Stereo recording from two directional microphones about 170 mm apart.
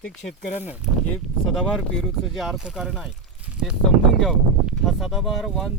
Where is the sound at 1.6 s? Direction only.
Centre (ahead or behind).